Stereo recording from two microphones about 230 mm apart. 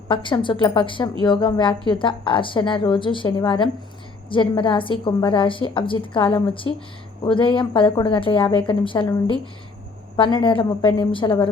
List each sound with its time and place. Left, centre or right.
0.1 s a woman's voice: left
10.2 s a woman's voice: left